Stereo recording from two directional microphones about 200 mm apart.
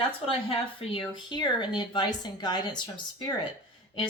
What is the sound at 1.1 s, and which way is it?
Speech, 20° left (ahead or behind).